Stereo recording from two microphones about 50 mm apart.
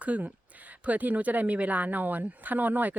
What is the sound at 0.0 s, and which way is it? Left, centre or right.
A woman's voice, right.